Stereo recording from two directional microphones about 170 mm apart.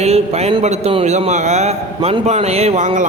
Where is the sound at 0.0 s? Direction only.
40° right (ahead or behind).